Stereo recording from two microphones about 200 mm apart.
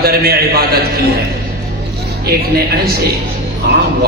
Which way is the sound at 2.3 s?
50° right (ahead or behind).